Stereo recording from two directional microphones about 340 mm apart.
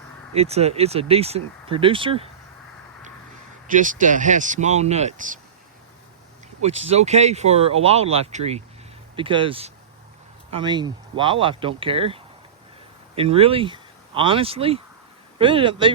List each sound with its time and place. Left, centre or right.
0.3 s speech: centre
3.7 s speech: right
6.6 s speech: centre